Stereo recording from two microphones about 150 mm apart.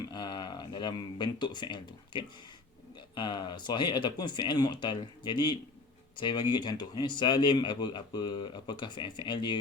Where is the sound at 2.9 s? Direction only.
30° left (ahead or behind).